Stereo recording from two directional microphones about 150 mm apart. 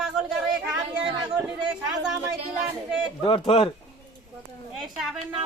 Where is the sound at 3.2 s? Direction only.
40° left (ahead or behind).